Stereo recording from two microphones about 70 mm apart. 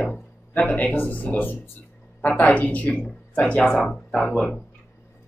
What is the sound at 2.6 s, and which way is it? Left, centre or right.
Speech, left.